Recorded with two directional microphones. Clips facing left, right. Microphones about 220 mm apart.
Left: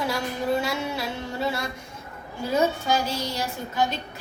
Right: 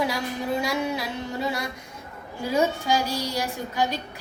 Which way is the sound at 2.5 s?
10° right (ahead or behind).